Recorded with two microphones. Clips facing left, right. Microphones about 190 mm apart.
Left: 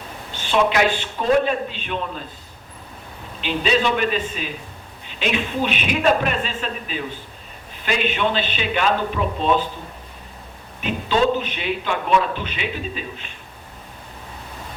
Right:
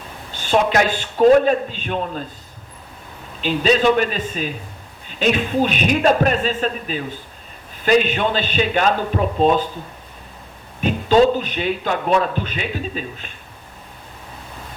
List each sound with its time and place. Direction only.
0.3 s a woman's voice: 45° right (ahead or behind)
3.4 s a man's voice: 40° right (ahead or behind)
10.8 s a man's voice: 40° right (ahead or behind)